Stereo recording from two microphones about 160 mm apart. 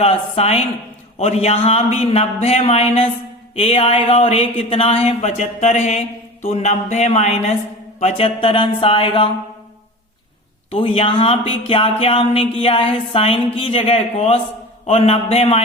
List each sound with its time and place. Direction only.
0.0 s speech: 40° left (ahead or behind)
10.7 s speech: 35° left (ahead or behind)